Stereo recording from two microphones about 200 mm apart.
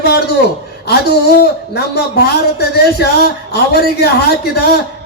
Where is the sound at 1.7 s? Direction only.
55° left (ahead or behind).